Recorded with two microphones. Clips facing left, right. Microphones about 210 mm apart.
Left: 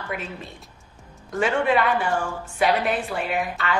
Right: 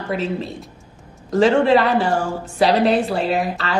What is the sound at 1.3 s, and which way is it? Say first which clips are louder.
A woman's voice: right 7 dB; 35° right (ahead or behind).